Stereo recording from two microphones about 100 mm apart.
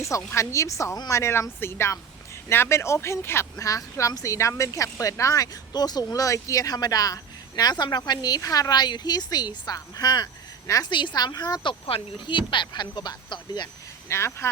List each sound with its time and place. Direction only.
0.3 s speech: 30° left (ahead or behind)
0.9 s speech: 40° left (ahead or behind)
1.2 s speech: 25° left (ahead or behind)
10.8 s speech: 50° left (ahead or behind)
14.1 s speech: 25° left (ahead or behind)